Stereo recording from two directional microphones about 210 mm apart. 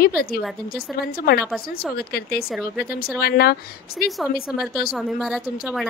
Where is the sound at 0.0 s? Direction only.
45° left (ahead or behind).